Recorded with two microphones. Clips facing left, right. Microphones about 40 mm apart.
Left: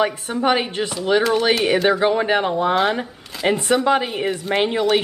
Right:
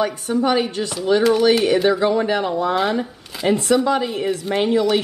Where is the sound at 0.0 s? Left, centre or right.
Left.